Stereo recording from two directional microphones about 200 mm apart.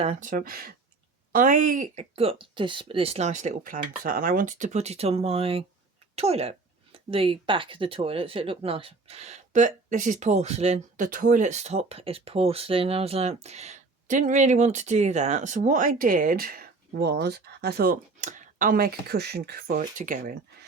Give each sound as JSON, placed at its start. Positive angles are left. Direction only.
{"t": 0.0, "sound": "speech", "side_deg": -35}